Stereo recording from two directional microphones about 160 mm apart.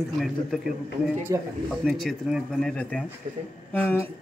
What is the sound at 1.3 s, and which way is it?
Speech, 20° right (ahead or behind).